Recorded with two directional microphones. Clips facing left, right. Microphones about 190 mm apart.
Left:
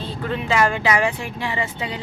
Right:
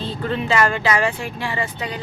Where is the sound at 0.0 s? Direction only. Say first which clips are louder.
Right 2 dB; 10° left (ahead or behind).